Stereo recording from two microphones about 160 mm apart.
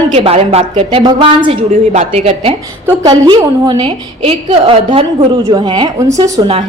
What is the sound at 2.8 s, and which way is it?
A woman's voice, 25° right (ahead or behind).